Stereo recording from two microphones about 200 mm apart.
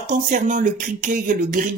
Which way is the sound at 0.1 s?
40° right (ahead or behind).